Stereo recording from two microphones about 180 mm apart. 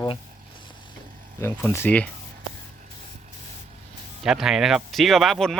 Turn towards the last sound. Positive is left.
turn(degrees=0)  # may be behind; listen again after turning